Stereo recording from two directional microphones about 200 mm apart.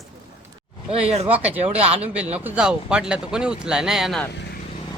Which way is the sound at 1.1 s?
30° right (ahead or behind).